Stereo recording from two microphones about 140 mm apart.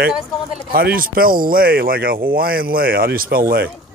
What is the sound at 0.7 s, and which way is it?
Speech, 90° right.